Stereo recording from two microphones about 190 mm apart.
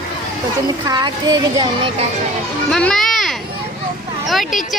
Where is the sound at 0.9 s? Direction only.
20° right (ahead or behind).